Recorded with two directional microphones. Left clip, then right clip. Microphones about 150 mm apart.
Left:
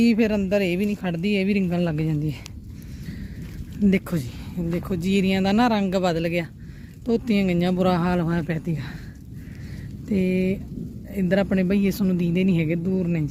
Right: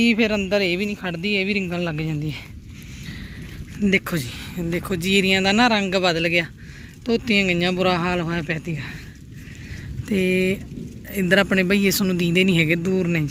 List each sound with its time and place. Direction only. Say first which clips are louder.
0.0 s speech: right 2 dB; 25° left (ahead or behind)
0.9 s speech: right 1 dB; 40° left (ahead or behind)
3.8 s speech: right 4 dB; 15° left (ahead or behind)
10.1 s speech: right 4 dB; centre (ahead or behind)